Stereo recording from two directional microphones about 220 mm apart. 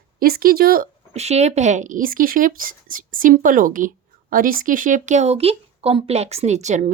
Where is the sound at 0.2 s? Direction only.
40° right (ahead or behind).